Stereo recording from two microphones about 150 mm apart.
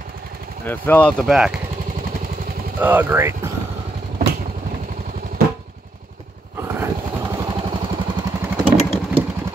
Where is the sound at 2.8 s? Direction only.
15° right (ahead or behind).